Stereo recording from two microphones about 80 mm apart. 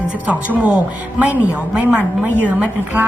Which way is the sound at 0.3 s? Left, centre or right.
Centre.